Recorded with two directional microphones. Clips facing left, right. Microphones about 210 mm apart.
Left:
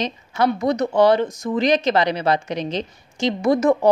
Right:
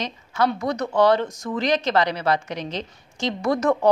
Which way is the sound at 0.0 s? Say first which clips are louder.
Left 3 dB; 20° left (ahead or behind).